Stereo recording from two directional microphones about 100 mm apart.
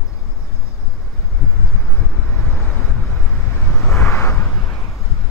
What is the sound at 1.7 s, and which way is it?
Vehicle, centre (ahead or behind).